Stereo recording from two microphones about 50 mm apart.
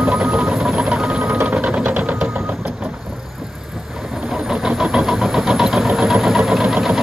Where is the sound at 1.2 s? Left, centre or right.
Right.